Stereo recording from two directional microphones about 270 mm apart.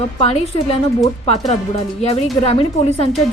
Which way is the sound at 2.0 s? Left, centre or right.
Left.